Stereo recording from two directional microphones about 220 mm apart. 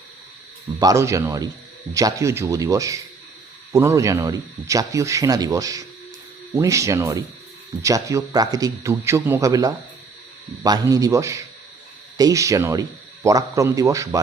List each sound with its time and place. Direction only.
0.8 s speech: 15° right (ahead or behind)